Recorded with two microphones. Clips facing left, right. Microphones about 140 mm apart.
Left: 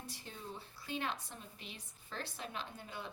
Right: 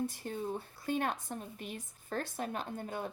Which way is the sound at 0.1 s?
50° right (ahead or behind).